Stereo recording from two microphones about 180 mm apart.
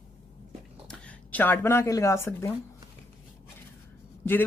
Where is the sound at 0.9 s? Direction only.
5° left (ahead or behind).